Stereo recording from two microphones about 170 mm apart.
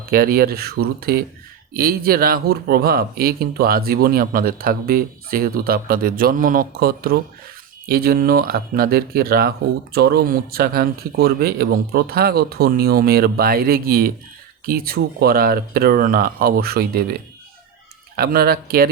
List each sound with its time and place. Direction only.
0.0 s speech: 60° right (ahead or behind)
18.2 s speech: 60° right (ahead or behind)